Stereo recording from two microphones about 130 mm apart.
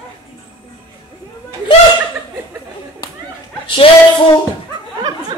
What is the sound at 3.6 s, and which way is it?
Music, 40° left (ahead or behind).